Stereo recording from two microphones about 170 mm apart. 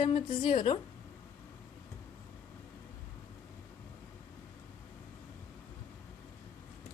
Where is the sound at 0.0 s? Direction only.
30° left (ahead or behind).